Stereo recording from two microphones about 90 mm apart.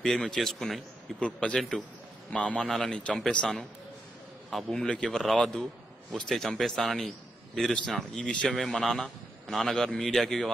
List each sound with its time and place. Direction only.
0.0 s a man's voice: 5° left (ahead or behind)